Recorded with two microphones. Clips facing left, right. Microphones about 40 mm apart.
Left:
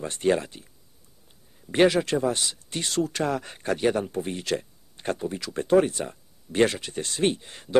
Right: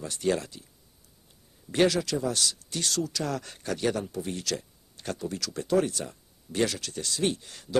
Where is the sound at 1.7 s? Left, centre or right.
Left.